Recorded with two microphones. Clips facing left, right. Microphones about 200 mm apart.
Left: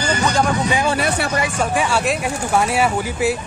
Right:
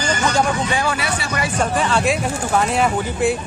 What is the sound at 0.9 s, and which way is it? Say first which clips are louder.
Speech: left 4 dB; 55° left (ahead or behind).